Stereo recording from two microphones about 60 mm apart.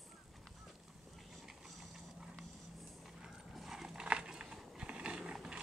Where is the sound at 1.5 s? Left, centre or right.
Centre.